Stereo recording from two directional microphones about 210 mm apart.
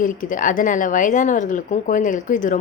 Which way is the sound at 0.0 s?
40° left (ahead or behind).